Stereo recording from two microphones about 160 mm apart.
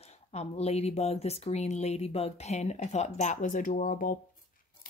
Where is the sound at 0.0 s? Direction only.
40° left (ahead or behind).